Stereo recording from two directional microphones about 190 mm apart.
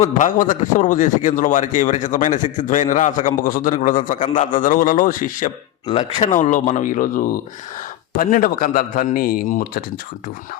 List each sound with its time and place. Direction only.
0.0 s a man's voice: 40° left (ahead or behind)